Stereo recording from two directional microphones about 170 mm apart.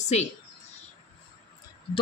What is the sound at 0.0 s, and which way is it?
Speech, 40° left (ahead or behind).